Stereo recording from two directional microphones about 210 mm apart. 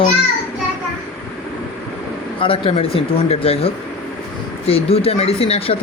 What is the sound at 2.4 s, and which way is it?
Speech, 25° left (ahead or behind).